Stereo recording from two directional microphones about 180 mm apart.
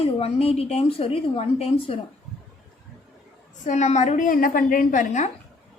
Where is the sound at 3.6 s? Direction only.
40° left (ahead or behind).